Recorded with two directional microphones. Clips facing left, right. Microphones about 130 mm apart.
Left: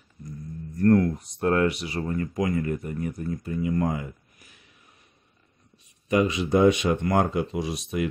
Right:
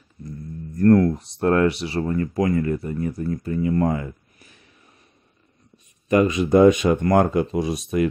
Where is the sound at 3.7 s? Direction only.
45° right (ahead or behind).